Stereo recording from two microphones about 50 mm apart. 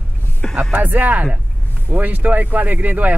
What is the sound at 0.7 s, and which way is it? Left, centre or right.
Speech, right.